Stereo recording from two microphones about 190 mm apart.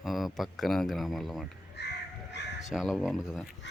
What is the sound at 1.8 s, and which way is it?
Crow, 60° left (ahead or behind).